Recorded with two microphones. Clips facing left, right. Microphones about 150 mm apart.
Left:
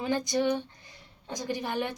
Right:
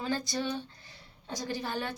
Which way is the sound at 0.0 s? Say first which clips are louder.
Left 5 dB; 20° left (ahead or behind).